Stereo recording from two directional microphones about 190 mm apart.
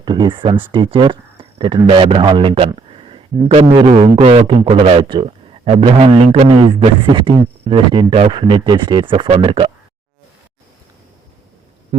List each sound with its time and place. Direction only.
0.0 s a man's voice: 25° right (ahead or behind)